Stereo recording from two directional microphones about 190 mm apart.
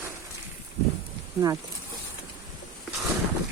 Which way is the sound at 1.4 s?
20° right (ahead or behind).